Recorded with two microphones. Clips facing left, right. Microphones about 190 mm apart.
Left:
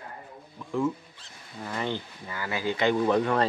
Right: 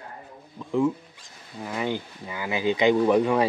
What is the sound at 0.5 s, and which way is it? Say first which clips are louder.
Speech: right 4 dB; 15° right (ahead or behind).